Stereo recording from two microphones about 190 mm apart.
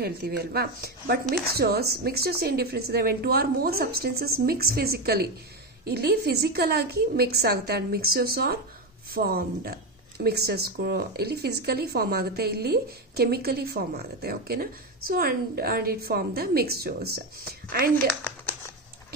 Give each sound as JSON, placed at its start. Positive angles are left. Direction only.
{"t": 0.0, "sound": "a woman's voice", "side_deg": -55}